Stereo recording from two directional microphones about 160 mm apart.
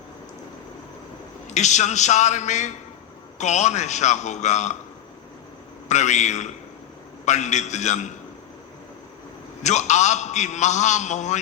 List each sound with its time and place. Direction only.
1.5 s a man's voice: 45° left (ahead or behind)
5.9 s a man's voice: 45° left (ahead or behind)
9.6 s a man's voice: 45° left (ahead or behind)